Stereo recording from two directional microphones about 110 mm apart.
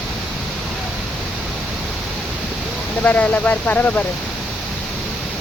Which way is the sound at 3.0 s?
15° left (ahead or behind).